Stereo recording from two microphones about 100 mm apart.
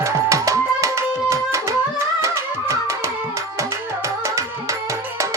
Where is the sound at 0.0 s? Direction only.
30° right (ahead or behind).